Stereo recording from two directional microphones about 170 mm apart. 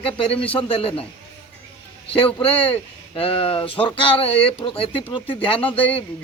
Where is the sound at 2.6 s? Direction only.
30° left (ahead or behind).